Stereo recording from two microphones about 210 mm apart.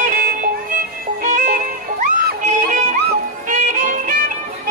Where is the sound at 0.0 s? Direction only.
40° right (ahead or behind).